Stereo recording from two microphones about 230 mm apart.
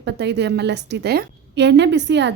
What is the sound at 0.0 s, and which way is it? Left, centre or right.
A woman's voice, right.